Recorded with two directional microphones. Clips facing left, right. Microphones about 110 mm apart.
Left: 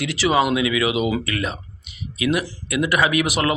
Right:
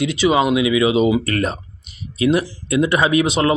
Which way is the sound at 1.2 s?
40° right (ahead or behind).